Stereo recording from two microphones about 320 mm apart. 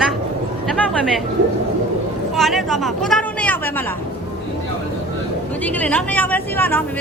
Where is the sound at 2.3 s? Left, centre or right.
Centre.